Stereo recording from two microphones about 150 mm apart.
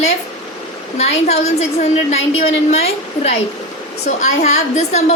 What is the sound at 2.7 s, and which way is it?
A woman's voice, 45° left (ahead or behind).